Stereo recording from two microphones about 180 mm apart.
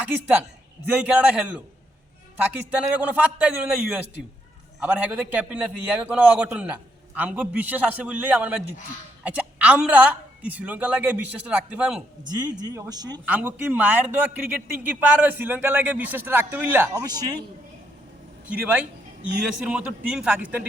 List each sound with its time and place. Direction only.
0.0 s a man's voice: 10° right (ahead or behind)
2.6 s a man's voice: 5° right (ahead or behind)
12.3 s speech: 20° right (ahead or behind)
13.2 s a man's voice: 10° right (ahead or behind)
18.4 s a man's voice: 10° right (ahead or behind)